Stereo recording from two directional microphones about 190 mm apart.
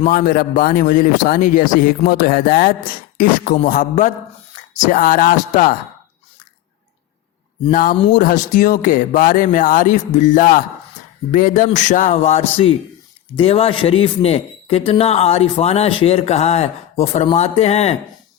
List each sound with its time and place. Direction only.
0.0 s a man's voice: 50° left (ahead or behind)
7.7 s a man's voice: 45° left (ahead or behind)